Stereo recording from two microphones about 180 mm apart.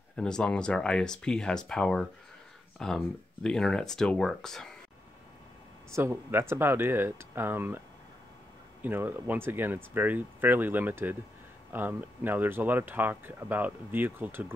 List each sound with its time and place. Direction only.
0.1 s speech: 5° left (ahead or behind)
5.9 s speech: 15° right (ahead or behind)
8.8 s speech: 10° right (ahead or behind)